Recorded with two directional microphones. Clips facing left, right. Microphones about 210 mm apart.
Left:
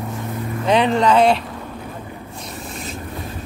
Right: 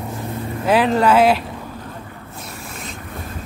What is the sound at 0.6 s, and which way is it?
Speech, 5° right (ahead or behind).